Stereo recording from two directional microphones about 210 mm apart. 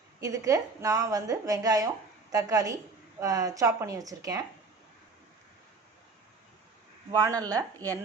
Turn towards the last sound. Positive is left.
turn(degrees=-15)  # may be behind; listen again after turning